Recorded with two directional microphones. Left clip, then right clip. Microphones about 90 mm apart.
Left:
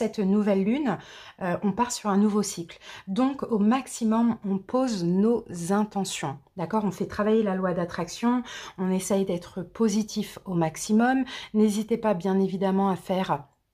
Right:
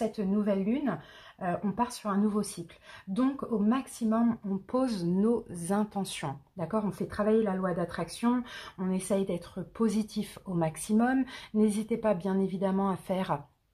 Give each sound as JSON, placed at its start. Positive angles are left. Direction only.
{"t": 0.0, "sound": "speech", "side_deg": 90}
{"t": 3.1, "sound": "speech", "side_deg": 70}
{"t": 4.5, "sound": "speech", "side_deg": 40}
{"t": 7.1, "sound": "speech", "side_deg": 35}
{"t": 8.0, "sound": "speech", "side_deg": 45}